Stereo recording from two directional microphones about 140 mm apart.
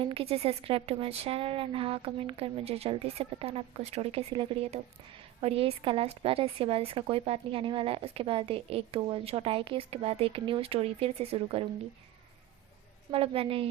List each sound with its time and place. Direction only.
0.0 s a woman's voice: 40° right (ahead or behind)
13.1 s a woman's voice: 40° right (ahead or behind)